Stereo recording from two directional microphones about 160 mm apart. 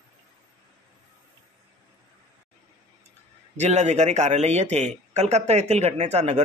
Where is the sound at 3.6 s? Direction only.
45° right (ahead or behind).